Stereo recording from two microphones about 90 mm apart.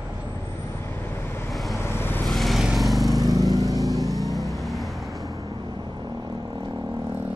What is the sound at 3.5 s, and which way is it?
Vehicle, 40° right (ahead or behind).